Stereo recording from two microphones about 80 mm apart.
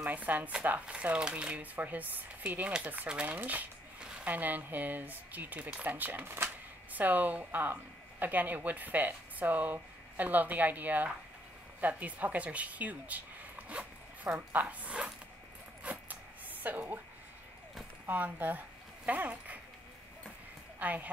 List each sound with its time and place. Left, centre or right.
0.0 s speech: centre
15.8 s a sound: centre
16.6 s speech: right
18.0 s speech: right
20.8 s speech: centre